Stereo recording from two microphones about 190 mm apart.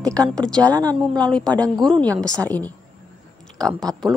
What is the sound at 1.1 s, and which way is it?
Speech, 5° left (ahead or behind).